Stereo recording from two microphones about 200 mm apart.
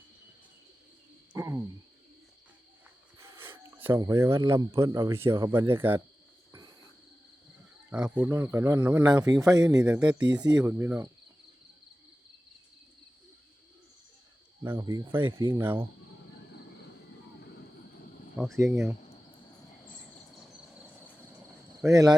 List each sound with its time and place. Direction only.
1.3 s a sound: 10° right (ahead or behind)
3.2 s a sound: 15° right (ahead or behind)
3.8 s speech: 10° right (ahead or behind)
7.9 s speech: 5° right (ahead or behind)
9.0 s speech: 20° right (ahead or behind)
9.8 s speech: 5° right (ahead or behind)
14.6 s speech: 15° right (ahead or behind)
18.5 s speech: 15° right (ahead or behind)
21.8 s speech: 15° right (ahead or behind)